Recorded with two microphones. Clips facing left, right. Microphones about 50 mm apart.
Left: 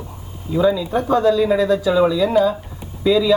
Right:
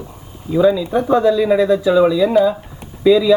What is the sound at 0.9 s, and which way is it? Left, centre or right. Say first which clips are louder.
Speech: right 2 dB; centre.